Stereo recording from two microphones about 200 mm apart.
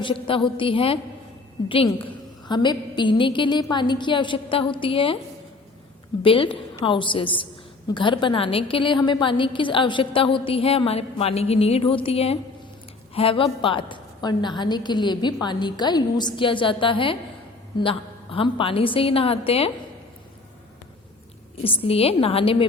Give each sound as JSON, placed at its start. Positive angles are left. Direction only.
{"t": 0.0, "sound": "a woman's voice", "side_deg": 25}
{"t": 6.2, "sound": "a woman's voice", "side_deg": 25}
{"t": 21.6, "sound": "a woman's voice", "side_deg": 30}